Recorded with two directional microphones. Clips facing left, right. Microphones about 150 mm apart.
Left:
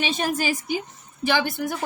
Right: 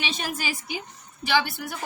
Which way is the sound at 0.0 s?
45° left (ahead or behind).